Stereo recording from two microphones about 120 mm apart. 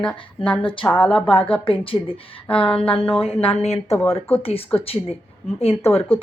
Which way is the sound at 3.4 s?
60° left (ahead or behind).